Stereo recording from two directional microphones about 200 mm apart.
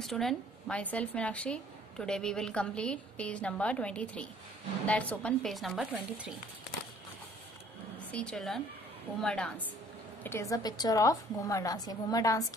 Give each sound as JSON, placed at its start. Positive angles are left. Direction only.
{"t": 0.0, "sound": "a woman's voice", "side_deg": 0}
{"t": 8.1, "sound": "a woman's voice", "side_deg": 5}